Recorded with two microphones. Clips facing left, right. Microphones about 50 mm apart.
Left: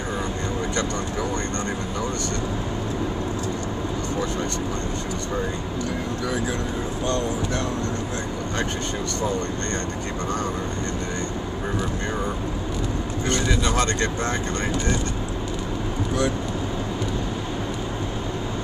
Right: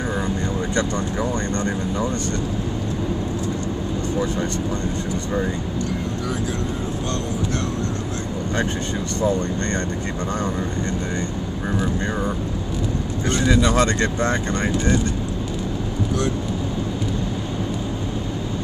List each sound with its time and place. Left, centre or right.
13.7 s speech: right